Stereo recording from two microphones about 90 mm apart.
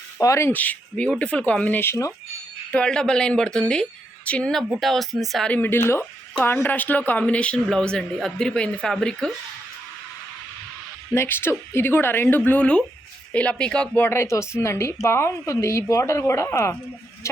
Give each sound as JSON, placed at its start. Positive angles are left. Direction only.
{"t": 0.2, "sound": "a woman's voice", "side_deg": 35}
{"t": 0.5, "sound": "speech", "side_deg": 20}
{"t": 2.7, "sound": "speech", "side_deg": 10}
{"t": 4.7, "sound": "speech", "side_deg": 0}
{"t": 5.5, "sound": "speech", "side_deg": 20}
{"t": 11.1, "sound": "speech", "side_deg": 30}
{"t": 14.1, "sound": "a woman's voice", "side_deg": 30}